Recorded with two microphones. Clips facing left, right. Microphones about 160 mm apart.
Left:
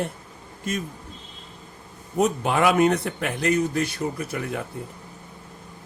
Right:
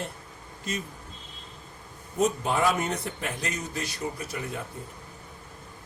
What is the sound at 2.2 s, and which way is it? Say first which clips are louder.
A man's voice: left 4 dB; 70° left (ahead or behind).